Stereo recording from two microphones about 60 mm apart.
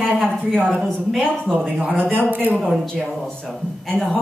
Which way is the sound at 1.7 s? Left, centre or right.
Right.